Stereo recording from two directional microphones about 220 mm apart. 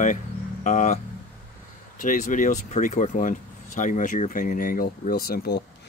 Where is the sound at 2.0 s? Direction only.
35° left (ahead or behind).